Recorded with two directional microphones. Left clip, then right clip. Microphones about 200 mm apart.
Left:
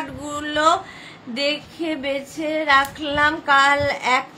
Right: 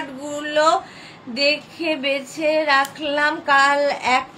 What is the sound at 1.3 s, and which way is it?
Female singing, 20° left (ahead or behind).